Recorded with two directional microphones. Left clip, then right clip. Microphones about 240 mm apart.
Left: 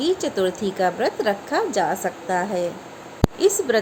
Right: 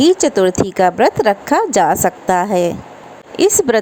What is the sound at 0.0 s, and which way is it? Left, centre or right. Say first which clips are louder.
A woman's voice: right 10 dB; right.